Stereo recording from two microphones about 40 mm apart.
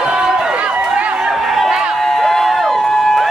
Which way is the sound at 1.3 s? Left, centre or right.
Centre.